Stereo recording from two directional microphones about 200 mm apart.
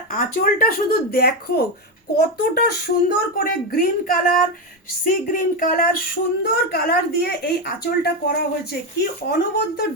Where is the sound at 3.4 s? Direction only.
45° left (ahead or behind).